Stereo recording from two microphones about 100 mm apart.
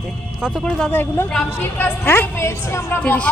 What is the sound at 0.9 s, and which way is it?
A woman's voice, 20° left (ahead or behind).